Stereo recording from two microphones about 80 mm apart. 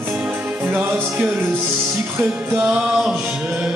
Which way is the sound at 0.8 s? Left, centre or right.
Right.